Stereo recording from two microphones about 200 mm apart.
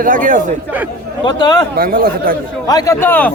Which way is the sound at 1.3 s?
20° left (ahead or behind).